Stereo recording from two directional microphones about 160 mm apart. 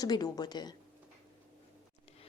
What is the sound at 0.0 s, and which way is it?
Speech, 25° left (ahead or behind).